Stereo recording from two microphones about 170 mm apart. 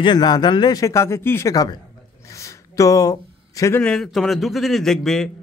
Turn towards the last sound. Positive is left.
turn(degrees=0)  # may be behind; listen again after turning